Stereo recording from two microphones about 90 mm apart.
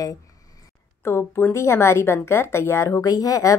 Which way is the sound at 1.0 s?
30° left (ahead or behind).